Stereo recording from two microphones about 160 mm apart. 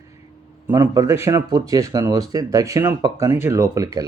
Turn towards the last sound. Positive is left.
turn(degrees=-20)  # may be behind; listen again after turning